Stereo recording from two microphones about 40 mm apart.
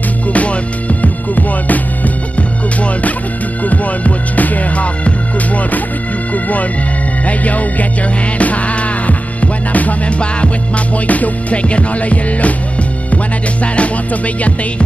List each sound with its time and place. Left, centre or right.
0.3 s music: left
3.6 s music: left
7.2 s music: left
13.7 s music: left